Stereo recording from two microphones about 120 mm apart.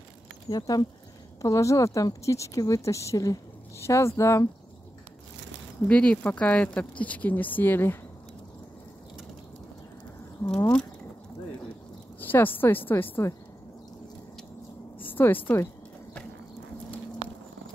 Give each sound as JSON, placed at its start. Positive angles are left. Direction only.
{"t": 0.5, "sound": "a woman's voice", "side_deg": 35}
{"t": 5.9, "sound": "speech", "side_deg": 10}
{"t": 10.4, "sound": "speech", "side_deg": 10}
{"t": 12.2, "sound": "speech", "side_deg": 15}
{"t": 15.0, "sound": "a sound", "side_deg": 15}